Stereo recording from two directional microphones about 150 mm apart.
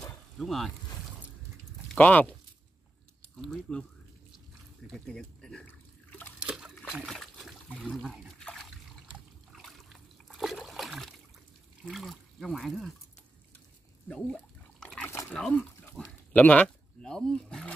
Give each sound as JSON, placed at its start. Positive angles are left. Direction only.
{"t": 0.4, "sound": "speech", "side_deg": 0}
{"t": 2.0, "sound": "speech", "side_deg": 10}
{"t": 3.3, "sound": "speech", "side_deg": 0}
{"t": 4.8, "sound": "speech", "side_deg": 5}
{"t": 5.7, "sound": "water", "side_deg": 15}
{"t": 6.4, "sound": "liquid", "side_deg": -5}
{"t": 7.2, "sound": "water", "side_deg": 0}
{"t": 10.2, "sound": "splash", "side_deg": 0}
{"t": 11.8, "sound": "speech", "side_deg": 0}
{"t": 14.8, "sound": "liquid", "side_deg": 5}
{"t": 15.0, "sound": "pig", "side_deg": 15}
{"t": 15.3, "sound": "speech", "side_deg": 5}